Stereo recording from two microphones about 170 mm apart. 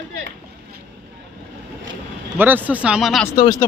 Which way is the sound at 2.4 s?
10° right (ahead or behind).